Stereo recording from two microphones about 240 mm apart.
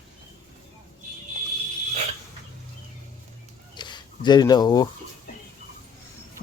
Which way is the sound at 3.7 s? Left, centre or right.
Centre.